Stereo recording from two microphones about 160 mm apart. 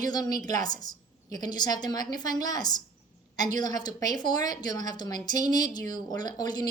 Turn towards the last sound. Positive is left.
turn(degrees=25)  # may be behind; listen again after turning